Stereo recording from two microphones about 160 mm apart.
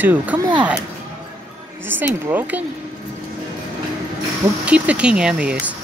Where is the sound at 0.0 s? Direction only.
10° right (ahead or behind).